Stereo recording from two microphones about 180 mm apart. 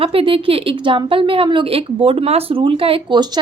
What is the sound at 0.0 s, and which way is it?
A woman's voice, 30° right (ahead or behind).